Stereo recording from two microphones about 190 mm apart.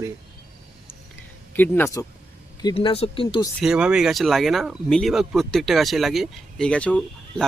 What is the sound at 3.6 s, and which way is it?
Speech, 5° right (ahead or behind).